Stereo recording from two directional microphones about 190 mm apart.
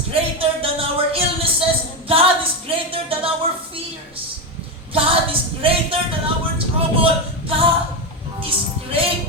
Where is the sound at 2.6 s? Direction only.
30° right (ahead or behind).